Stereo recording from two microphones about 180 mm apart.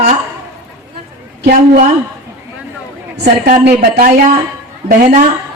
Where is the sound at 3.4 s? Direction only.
55° right (ahead or behind).